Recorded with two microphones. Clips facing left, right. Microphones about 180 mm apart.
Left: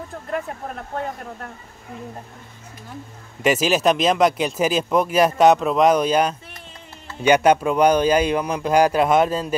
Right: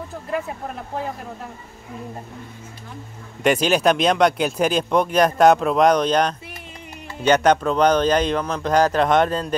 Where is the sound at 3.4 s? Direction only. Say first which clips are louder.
Right 1 dB; 5° left (ahead or behind).